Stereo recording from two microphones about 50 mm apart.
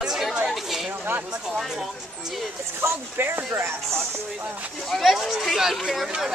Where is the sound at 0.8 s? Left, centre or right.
Right.